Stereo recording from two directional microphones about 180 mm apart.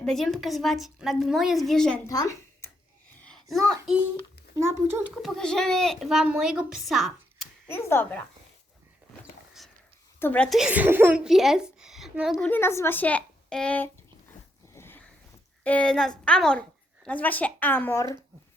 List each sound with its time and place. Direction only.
0.0 s a woman's voice: centre (ahead or behind)
2.0 s a woman's voice: 20° left (ahead or behind)
4.5 s a child's voice: 15° right (ahead or behind)
5.1 s a woman's voice: centre (ahead or behind)
7.7 s a woman's voice: 10° left (ahead or behind)
10.2 s a woman's voice: 10° left (ahead or behind)
12.5 s a woman's voice: 10° left (ahead or behind)
14.8 s a sound: 10° left (ahead or behind)
15.6 s a woman's voice: 5° left (ahead or behind)